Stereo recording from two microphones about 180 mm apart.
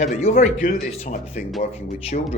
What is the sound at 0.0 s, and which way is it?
Speech, 40° left (ahead or behind).